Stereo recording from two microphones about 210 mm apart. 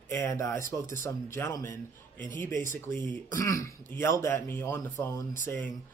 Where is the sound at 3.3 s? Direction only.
15° left (ahead or behind).